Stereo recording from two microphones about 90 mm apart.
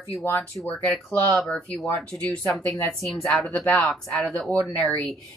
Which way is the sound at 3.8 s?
Centre (ahead or behind).